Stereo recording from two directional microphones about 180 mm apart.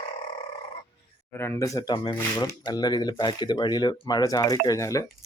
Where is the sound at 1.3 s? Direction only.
15° left (ahead or behind).